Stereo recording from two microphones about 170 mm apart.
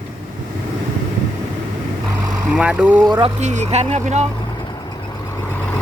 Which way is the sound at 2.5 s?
5° right (ahead or behind).